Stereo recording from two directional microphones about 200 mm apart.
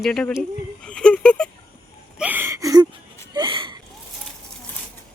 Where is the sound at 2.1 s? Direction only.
10° right (ahead or behind).